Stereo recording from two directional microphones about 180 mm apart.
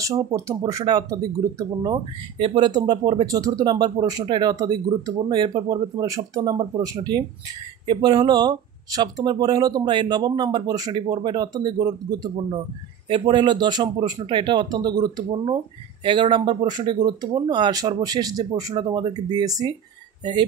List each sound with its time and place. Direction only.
0.5 s speech: 20° right (ahead or behind)